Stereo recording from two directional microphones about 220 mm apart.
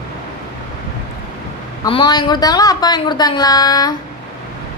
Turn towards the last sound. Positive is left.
turn(degrees=15)  # may be behind; listen again after turning